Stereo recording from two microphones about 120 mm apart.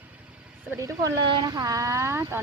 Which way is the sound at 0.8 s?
30° right (ahead or behind).